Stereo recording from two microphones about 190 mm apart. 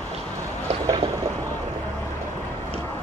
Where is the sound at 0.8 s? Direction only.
20° right (ahead or behind).